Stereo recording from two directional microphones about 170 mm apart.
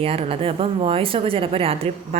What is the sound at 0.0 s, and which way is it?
Speech, 35° right (ahead or behind).